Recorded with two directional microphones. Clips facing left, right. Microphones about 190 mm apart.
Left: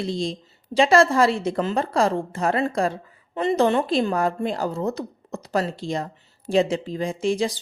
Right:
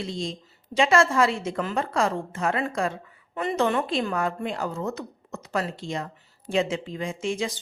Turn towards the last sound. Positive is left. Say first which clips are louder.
# left 5 dB
turn(degrees=35)  # may be behind; listen again after turning